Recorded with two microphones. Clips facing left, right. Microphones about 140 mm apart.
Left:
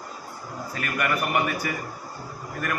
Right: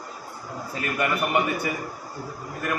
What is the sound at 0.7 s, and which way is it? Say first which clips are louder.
A man's voice: right 1 dB; 20° right (ahead or behind).